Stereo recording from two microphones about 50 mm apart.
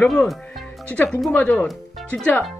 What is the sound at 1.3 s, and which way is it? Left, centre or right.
Speech, left.